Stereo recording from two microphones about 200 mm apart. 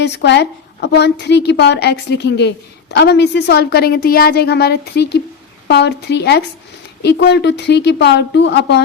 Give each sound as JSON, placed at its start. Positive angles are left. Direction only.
{"t": 0.0, "sound": "a woman's voice", "side_deg": 60}